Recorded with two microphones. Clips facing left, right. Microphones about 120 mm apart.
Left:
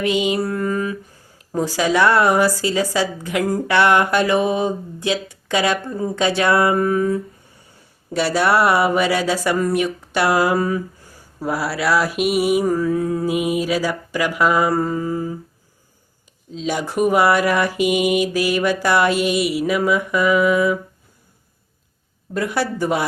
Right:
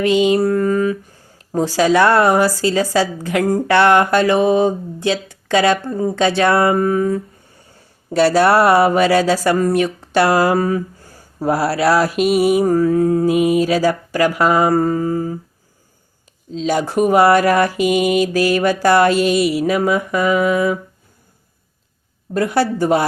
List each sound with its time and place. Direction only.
0.0 s a woman's voice: 35° right (ahead or behind)
8.2 s a woman's voice: 35° right (ahead or behind)
13.2 s mantra: 15° left (ahead or behind)
13.7 s a woman's voice: 35° right (ahead or behind)
16.6 s a woman's voice: 35° right (ahead or behind)
22.4 s a woman's voice: 30° right (ahead or behind)